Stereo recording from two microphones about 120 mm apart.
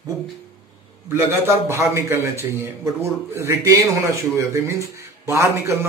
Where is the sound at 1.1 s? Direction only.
20° right (ahead or behind).